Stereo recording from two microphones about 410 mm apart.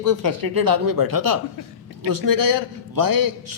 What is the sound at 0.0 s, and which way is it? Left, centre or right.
A man's voice, right.